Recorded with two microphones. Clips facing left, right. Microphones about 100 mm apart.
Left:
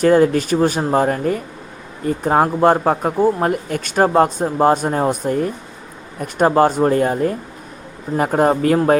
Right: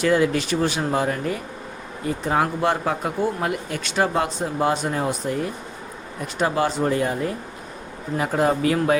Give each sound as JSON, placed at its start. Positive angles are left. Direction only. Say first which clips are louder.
{"t": 0.0, "sound": "speech", "louder": "left 6 dB", "side_deg": 45}